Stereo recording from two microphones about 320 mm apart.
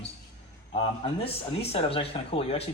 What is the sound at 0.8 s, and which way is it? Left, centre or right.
Speech, centre.